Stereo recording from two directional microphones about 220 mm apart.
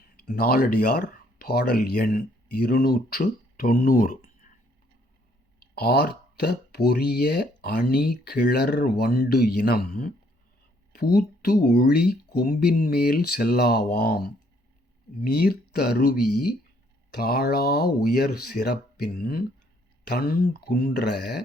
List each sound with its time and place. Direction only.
0.3 s speech: 45° left (ahead or behind)
5.7 s speech: 45° left (ahead or behind)
15.2 s speech: 45° left (ahead or behind)